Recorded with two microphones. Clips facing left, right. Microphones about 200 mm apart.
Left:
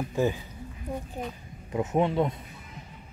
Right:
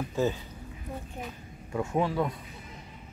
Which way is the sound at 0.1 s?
15° left (ahead or behind).